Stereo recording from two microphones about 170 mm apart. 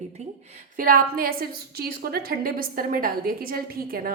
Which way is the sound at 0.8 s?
60° right (ahead or behind).